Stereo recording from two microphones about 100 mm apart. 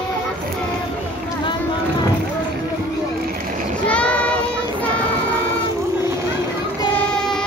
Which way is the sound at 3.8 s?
10° left (ahead or behind).